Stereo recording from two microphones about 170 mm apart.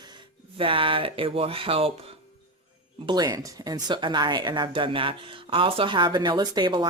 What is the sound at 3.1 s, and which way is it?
Speech, 25° right (ahead or behind).